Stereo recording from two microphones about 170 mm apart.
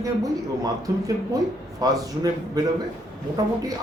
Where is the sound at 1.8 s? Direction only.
20° right (ahead or behind).